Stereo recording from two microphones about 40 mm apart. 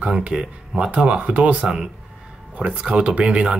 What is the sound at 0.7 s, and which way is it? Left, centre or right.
Speech, right.